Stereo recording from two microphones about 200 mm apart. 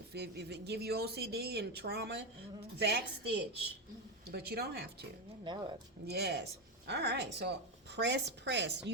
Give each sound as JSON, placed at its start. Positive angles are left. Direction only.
{"t": 0.1, "sound": "speech", "side_deg": -55}
{"t": 6.1, "sound": "speech", "side_deg": -55}